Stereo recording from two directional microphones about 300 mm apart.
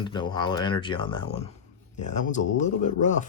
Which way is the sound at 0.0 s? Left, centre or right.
Centre.